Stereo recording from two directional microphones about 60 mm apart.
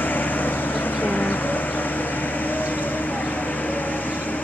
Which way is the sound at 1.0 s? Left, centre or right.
Left.